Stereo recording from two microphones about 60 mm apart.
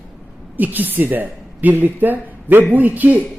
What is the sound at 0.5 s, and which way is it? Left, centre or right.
A woman's voice, right.